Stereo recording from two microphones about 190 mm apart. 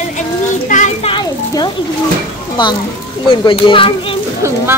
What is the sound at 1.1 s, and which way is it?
A child's voice, 25° left (ahead or behind).